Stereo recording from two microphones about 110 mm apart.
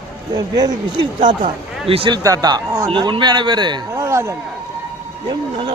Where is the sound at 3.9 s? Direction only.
25° right (ahead or behind).